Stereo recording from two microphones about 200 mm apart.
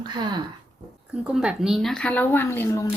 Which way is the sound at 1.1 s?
5° right (ahead or behind).